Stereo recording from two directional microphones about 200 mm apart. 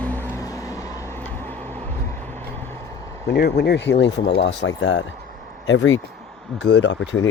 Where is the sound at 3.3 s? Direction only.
55° left (ahead or behind); by 6.0 s 75° left (ahead or behind).